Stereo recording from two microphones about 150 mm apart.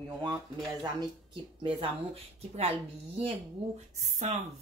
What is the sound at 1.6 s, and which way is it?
Speech, 35° right (ahead or behind).